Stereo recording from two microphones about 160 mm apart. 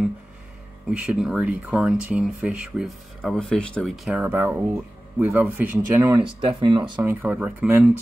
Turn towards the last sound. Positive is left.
turn(degrees=-10)  # may be behind; listen again after turning